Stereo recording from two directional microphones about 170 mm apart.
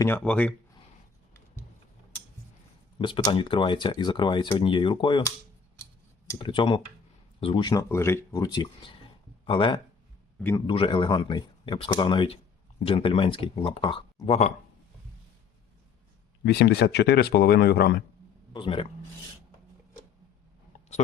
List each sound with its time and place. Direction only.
0.0 s speech: 10° left (ahead or behind)
3.0 s speech: 30° left (ahead or behind)
6.4 s speech: 30° left (ahead or behind)
7.7 s speech: 15° left (ahead or behind); by 14.5 s 40° left (ahead or behind)
16.4 s speech: 80° left
18.5 s speech: 30° left (ahead or behind)